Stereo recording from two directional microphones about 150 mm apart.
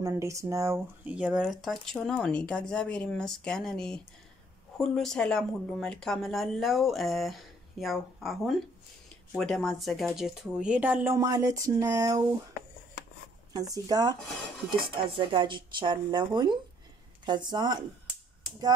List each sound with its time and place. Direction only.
0.0 s speech: 20° right (ahead or behind)
1.1 s speech: 5° right (ahead or behind)
11.1 s speech: 20° right (ahead or behind)
13.5 s speech: 25° right (ahead or behind)
15.1 s speech: 35° right (ahead or behind)